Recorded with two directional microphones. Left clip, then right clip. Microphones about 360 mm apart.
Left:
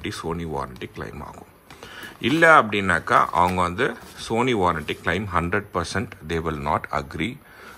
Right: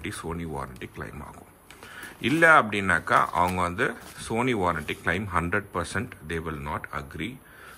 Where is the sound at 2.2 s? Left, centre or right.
Centre.